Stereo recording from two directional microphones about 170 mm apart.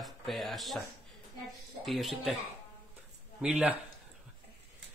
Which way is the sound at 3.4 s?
5° right (ahead or behind).